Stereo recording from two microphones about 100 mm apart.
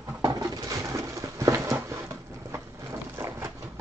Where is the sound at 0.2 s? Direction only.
35° right (ahead or behind).